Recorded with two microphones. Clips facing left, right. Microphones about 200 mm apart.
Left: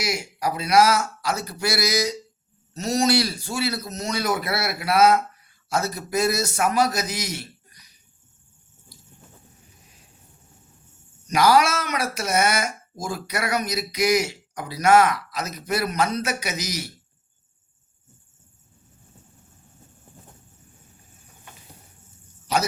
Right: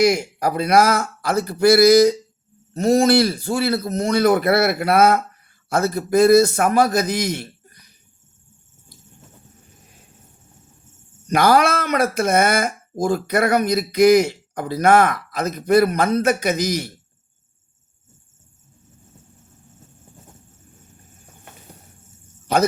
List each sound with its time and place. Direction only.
0.0 s a man's voice: 55° right (ahead or behind)
11.3 s speech: 55° right (ahead or behind)
22.5 s speech: 55° right (ahead or behind)